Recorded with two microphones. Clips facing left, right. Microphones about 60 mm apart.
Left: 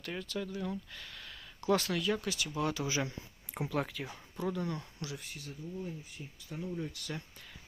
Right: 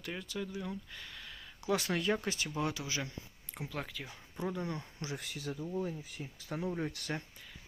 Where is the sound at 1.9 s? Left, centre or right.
Right.